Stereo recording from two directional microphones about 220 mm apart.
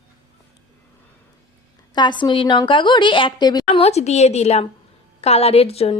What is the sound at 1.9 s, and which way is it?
Speech, 20° left (ahead or behind).